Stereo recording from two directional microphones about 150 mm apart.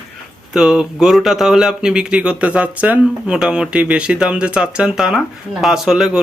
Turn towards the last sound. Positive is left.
turn(degrees=-5)  # may be behind; listen again after turning